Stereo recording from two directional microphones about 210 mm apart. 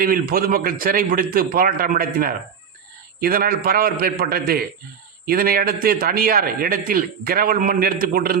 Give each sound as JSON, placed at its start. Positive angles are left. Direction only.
{"t": 0.0, "sound": "a man's voice", "side_deg": -45}